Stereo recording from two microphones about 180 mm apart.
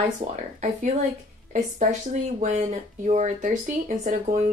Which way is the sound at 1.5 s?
40° right (ahead or behind).